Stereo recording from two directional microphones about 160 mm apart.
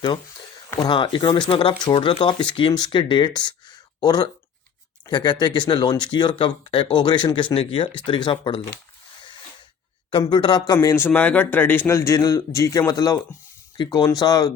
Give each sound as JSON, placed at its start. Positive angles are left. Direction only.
{"t": 0.0, "sound": "speech", "side_deg": 30}
{"t": 10.1, "sound": "speech", "side_deg": 30}
{"t": 10.8, "sound": "a man's voice", "side_deg": 15}